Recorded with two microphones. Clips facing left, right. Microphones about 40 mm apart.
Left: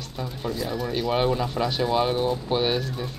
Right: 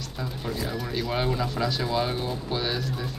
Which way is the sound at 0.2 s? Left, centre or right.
Centre.